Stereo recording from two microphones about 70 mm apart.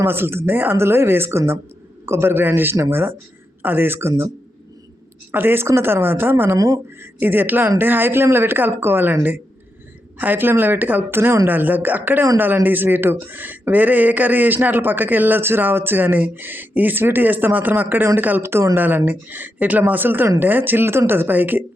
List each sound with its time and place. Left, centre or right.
0.0 s speech: right
5.3 s speech: right